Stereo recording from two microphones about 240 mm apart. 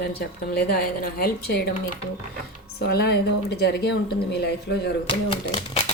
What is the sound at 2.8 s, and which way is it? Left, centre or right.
Speech, left.